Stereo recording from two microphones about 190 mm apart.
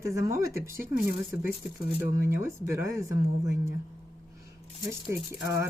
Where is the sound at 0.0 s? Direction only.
15° right (ahead or behind).